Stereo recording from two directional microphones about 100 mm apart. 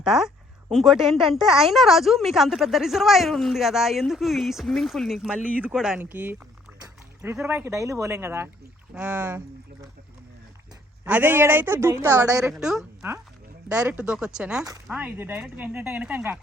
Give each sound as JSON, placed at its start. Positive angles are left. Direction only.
{"t": 0.0, "sound": "speech", "side_deg": -5}
{"t": 5.3, "sound": "speech", "side_deg": -10}
{"t": 6.0, "sound": "speech", "side_deg": -20}
{"t": 7.4, "sound": "speech", "side_deg": -25}
{"t": 11.0, "sound": "speech", "side_deg": -15}
{"t": 12.5, "sound": "speech", "side_deg": -5}